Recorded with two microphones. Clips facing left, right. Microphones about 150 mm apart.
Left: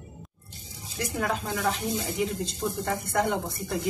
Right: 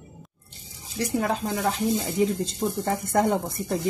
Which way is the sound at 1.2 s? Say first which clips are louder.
Even; 30° right (ahead or behind).